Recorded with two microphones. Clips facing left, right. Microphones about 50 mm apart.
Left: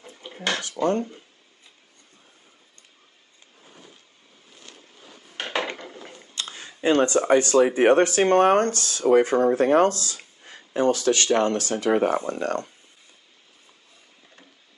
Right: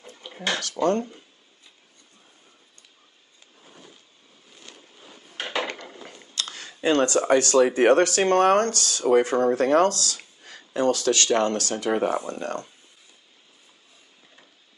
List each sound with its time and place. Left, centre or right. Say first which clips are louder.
0.6 s speech: right 1 dB; centre
6.0 s a sound: right 3 dB; centre
7.2 s speech: even; centre; by 12.7 s left